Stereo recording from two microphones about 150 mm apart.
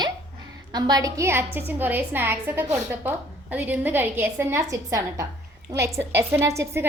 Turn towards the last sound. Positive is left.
turn(degrees=-20)  # may be behind; listen again after turning